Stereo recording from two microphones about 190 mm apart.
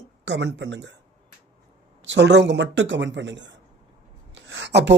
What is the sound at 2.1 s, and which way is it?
A man's voice, 65° right (ahead or behind).